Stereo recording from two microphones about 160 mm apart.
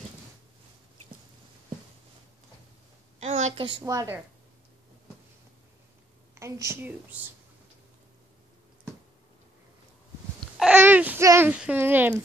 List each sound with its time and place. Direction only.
3.2 s a sound: 45° right (ahead or behind)
3.8 s a woman's voice: 20° right (ahead or behind)
6.3 s speech: 20° right (ahead or behind)
10.6 s babbling: 10° right (ahead or behind)
11.2 s speech: 15° right (ahead or behind)